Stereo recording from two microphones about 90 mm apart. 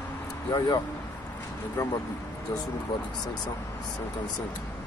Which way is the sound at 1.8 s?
40° left (ahead or behind).